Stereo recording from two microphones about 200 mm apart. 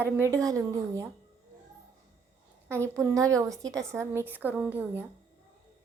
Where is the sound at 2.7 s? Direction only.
15° right (ahead or behind).